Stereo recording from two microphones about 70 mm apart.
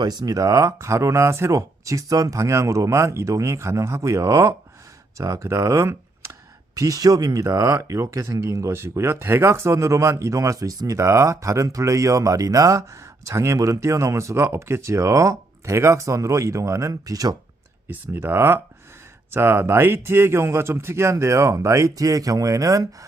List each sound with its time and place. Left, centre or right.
0.0 s speech: right
6.7 s speech: right
17.8 s speech: right